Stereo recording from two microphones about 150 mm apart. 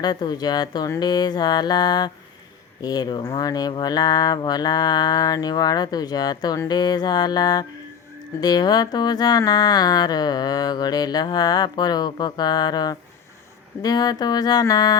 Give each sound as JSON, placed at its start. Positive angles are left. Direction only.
{"t": 0.0, "sound": "speech", "side_deg": 25}